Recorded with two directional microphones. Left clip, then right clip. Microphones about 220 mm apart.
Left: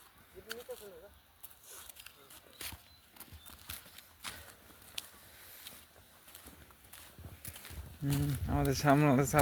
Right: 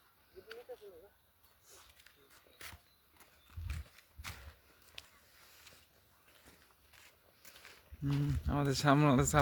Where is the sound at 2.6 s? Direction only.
25° left (ahead or behind).